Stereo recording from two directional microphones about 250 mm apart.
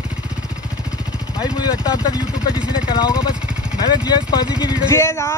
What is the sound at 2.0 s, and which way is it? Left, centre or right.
Speech, centre.